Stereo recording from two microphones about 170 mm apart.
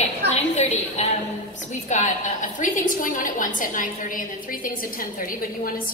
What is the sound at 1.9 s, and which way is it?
A woman's voice, 45° left (ahead or behind).